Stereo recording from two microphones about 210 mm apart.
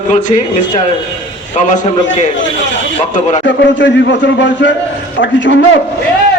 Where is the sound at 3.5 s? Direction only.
60° left (ahead or behind).